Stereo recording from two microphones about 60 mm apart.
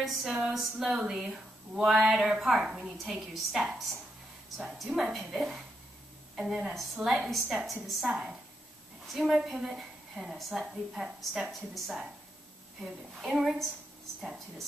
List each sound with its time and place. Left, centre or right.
0.0 s a woman's voice: centre